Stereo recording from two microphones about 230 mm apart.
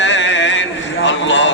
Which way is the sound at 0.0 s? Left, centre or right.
Left.